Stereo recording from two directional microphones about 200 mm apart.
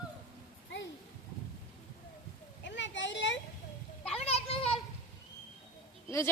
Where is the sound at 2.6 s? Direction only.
65° left (ahead or behind).